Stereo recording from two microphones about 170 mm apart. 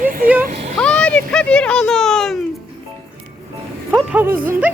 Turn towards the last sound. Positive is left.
turn(degrees=-10)  # may be behind; listen again after turning